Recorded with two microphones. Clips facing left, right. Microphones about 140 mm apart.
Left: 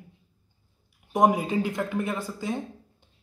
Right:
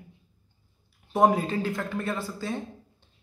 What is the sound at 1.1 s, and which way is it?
Speech, 15° left (ahead or behind).